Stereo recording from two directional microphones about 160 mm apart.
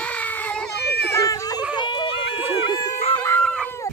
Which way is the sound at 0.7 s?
90° left.